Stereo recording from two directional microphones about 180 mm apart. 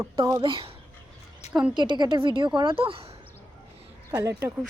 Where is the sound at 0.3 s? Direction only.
30° right (ahead or behind).